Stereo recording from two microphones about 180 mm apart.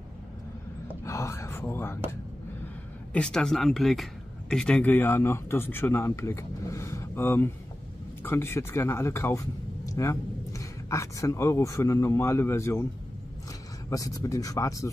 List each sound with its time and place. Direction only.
1.0 s speech: 15° left (ahead or behind)
3.1 s speech: 5° left (ahead or behind)
13.8 s speech: 20° left (ahead or behind)